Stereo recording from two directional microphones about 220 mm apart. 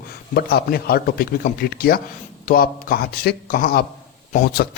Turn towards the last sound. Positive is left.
turn(degrees=40)  # may be behind; listen again after turning